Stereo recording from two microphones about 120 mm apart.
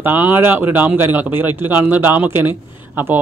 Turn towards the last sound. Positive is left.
turn(degrees=-15)  # may be behind; listen again after turning